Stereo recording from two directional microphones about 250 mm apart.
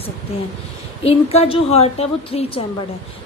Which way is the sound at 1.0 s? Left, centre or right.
Left.